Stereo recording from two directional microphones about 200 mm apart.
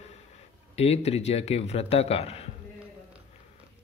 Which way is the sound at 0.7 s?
30° left (ahead or behind).